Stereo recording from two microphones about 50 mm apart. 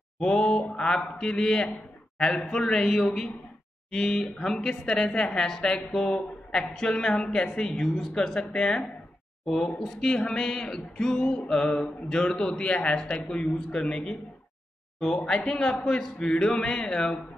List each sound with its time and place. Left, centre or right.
0.2 s speech: centre
15.2 s speech: centre